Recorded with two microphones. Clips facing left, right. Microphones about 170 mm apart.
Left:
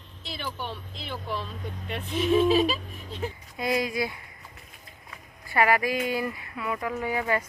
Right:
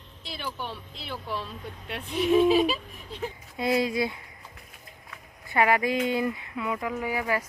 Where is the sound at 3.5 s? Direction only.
25° right (ahead or behind).